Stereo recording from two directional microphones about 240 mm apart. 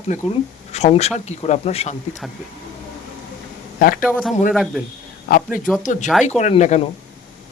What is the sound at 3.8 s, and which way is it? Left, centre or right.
Speech, left.